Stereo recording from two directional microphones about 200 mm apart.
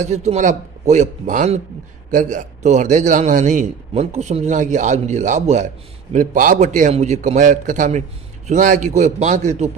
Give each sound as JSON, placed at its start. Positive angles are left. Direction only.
{"t": 0.0, "sound": "a man's voice", "side_deg": -35}